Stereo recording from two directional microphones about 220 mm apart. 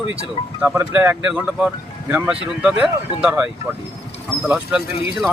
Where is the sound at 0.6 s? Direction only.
10° right (ahead or behind).